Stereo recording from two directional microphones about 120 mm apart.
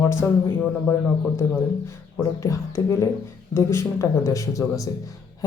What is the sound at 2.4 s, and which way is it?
Speech, 25° left (ahead or behind).